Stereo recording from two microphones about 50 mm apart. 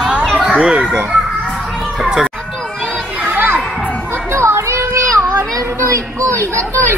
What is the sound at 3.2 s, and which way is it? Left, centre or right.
Children playing, right.